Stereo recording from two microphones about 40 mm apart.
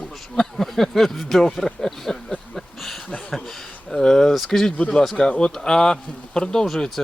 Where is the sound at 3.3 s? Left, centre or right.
Centre.